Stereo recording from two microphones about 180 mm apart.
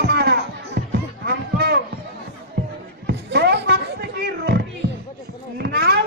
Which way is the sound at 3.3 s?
65° right (ahead or behind).